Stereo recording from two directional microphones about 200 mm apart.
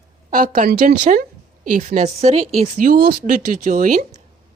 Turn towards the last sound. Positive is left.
turn(degrees=-40)  # may be behind; listen again after turning